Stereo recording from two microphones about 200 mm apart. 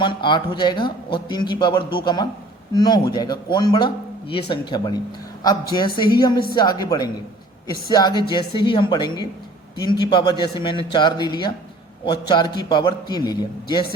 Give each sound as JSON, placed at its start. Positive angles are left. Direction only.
{"t": 0.0, "sound": "speech", "side_deg": 25}